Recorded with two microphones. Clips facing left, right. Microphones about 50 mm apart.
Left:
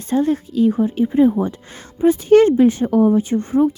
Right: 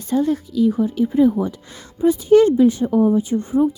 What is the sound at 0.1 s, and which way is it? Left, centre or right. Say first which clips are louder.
Speech: left 1 dB; left.